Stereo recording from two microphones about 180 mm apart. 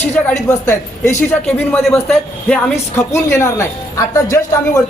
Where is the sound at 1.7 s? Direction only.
5° left (ahead or behind).